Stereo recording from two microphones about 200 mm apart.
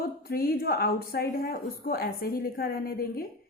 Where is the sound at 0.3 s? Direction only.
50° left (ahead or behind).